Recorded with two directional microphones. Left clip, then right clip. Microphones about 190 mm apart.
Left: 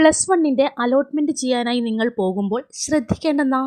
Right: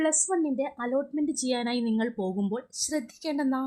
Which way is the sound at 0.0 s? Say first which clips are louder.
Left 11 dB; 30° left (ahead or behind).